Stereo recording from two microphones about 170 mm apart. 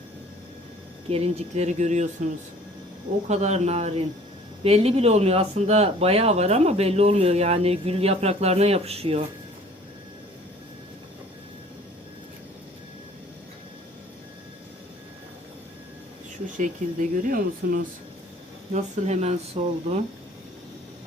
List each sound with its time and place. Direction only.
1.1 s speech: 35° right (ahead or behind)
3.2 s speech: 40° right (ahead or behind)
16.6 s speech: 50° right (ahead or behind)
18.7 s speech: 40° right (ahead or behind)